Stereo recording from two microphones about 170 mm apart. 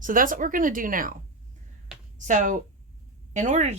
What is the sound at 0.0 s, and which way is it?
A woman's voice, 55° right (ahead or behind).